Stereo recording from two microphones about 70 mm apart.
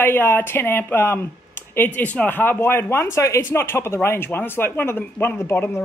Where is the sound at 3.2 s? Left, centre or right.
Left.